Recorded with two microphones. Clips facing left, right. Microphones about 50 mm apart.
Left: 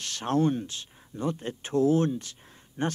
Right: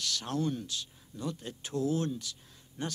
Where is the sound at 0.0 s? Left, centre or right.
Left.